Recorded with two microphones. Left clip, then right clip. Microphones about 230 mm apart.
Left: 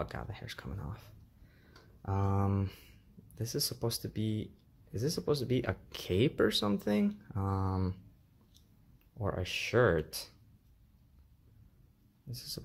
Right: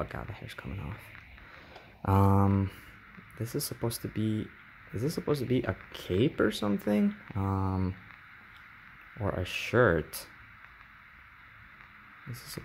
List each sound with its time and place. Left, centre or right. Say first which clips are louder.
0.0 s speech: right 3 dB; centre
2.0 s speech: right 8 dB; right; by 7.9 s centre
9.2 s speech: right 2 dB; centre
12.3 s speech: left 1 dB; centre